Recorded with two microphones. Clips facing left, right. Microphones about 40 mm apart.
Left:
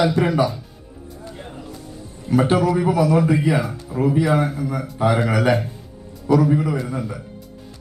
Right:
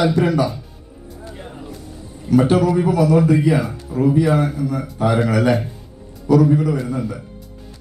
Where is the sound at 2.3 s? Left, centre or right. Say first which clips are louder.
Right 2 dB; centre.